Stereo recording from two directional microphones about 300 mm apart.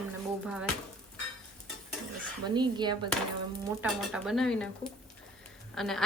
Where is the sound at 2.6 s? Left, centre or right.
Centre.